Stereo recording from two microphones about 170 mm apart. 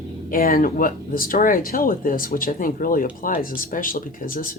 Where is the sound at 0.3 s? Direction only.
60° left (ahead or behind).